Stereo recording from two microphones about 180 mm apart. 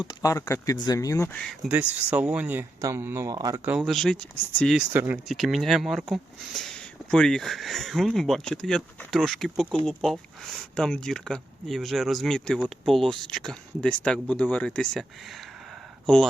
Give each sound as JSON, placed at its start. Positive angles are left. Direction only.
{"t": 0.1, "sound": "speech", "side_deg": 20}
{"t": 1.3, "sound": "speech", "side_deg": 5}
{"t": 1.6, "sound": "speech", "side_deg": -10}
{"t": 3.7, "sound": "speech", "side_deg": 0}
{"t": 4.9, "sound": "speech", "side_deg": -10}